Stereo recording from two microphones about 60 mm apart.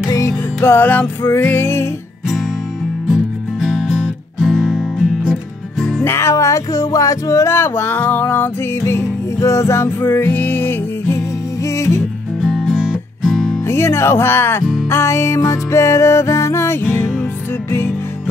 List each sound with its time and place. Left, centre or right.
0.0 s music: left
0.3 s music: left
3.1 s music: centre
6.0 s speech: left
9.4 s music: left
12.5 s music: centre
13.7 s speech: left
17.6 s music: left